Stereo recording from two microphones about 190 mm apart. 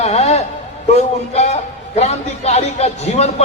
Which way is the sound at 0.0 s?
35° left (ahead or behind).